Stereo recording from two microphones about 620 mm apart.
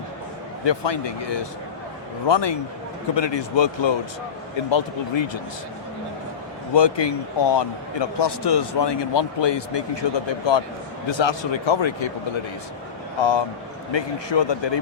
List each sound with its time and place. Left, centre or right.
0.6 s a man's voice: left
6.7 s a man's voice: left
13.1 s a man's voice: left